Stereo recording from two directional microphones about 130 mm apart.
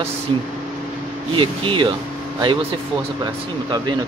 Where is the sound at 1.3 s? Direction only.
40° right (ahead or behind).